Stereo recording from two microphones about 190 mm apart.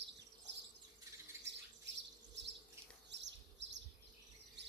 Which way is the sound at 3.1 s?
65° right (ahead or behind).